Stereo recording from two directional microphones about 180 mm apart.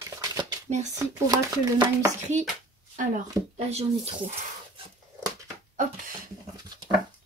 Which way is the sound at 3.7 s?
35° right (ahead or behind).